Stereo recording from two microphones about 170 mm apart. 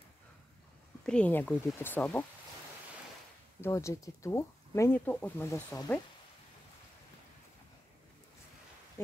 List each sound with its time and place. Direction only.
1.0 s speech: 5° left (ahead or behind)
3.6 s speech: 15° left (ahead or behind)